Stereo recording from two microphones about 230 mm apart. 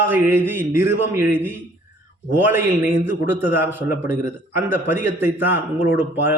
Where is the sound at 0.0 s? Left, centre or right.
Centre.